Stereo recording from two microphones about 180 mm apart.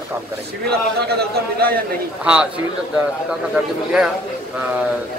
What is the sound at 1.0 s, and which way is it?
Speech, 60° right (ahead or behind).